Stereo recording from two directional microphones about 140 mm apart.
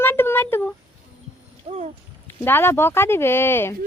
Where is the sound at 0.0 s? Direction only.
15° left (ahead or behind).